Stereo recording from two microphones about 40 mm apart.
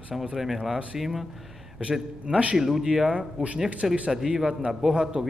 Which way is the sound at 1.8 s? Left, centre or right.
Right.